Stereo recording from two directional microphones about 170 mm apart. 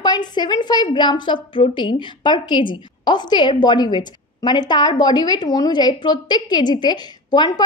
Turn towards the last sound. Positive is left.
turn(degrees=25)  # may be behind; listen again after turning